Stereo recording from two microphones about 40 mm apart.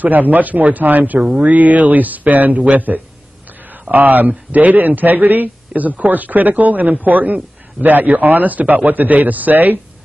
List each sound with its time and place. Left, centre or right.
0.0 s a man's voice: right